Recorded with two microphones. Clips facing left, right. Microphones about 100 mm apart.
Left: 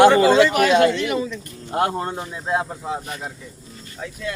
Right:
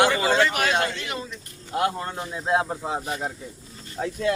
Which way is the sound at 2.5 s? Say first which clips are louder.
Even; 20° right (ahead or behind).